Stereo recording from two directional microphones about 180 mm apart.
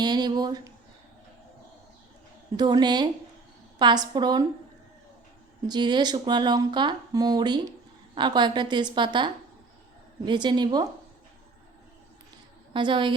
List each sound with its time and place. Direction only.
0.0 s a sound: 25° right (ahead or behind)
2.6 s speech: 25° right (ahead or behind)
5.6 s speech: 25° right (ahead or behind)
12.7 s speech: 25° right (ahead or behind)